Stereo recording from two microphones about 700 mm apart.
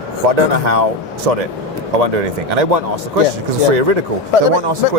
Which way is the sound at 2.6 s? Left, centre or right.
Right.